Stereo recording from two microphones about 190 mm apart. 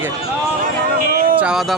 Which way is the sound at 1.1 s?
50° right (ahead or behind).